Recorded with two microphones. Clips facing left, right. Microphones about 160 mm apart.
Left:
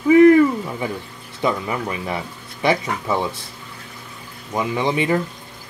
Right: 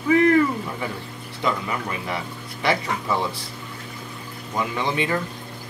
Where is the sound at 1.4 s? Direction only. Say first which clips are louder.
Left 4 dB; 25° left (ahead or behind).